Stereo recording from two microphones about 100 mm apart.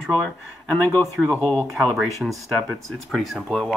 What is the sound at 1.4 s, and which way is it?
Speech, 15° left (ahead or behind).